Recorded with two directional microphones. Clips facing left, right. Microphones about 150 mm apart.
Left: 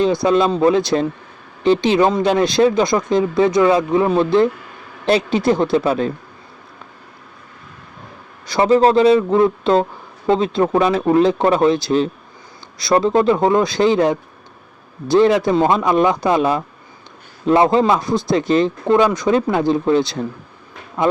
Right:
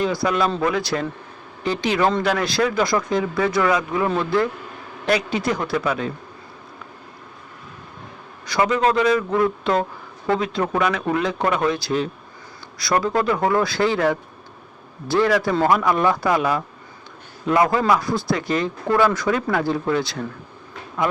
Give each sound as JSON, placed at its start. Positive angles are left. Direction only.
{"t": 0.0, "sound": "speech", "side_deg": 25}
{"t": 8.4, "sound": "speech", "side_deg": 25}